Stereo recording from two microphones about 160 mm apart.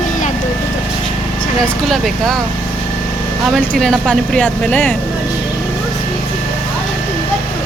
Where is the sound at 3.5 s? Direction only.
5° left (ahead or behind).